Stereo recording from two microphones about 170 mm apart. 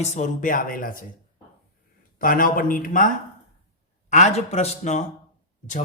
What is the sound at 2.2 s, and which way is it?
Speech, 55° left (ahead or behind).